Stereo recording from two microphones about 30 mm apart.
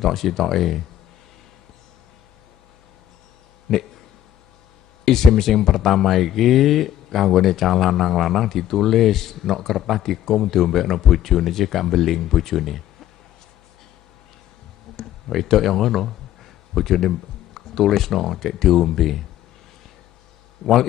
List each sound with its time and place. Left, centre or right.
0.0 s speech: centre
3.7 s speech: centre
5.0 s speech: centre
15.0 s a sound: centre
17.6 s speech: centre